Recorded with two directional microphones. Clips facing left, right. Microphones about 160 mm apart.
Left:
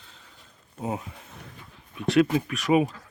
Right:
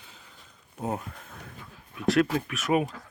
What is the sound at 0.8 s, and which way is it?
Speech, centre (ahead or behind).